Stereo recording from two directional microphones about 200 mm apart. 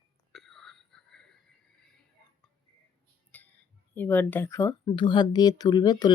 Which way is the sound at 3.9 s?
10° left (ahead or behind).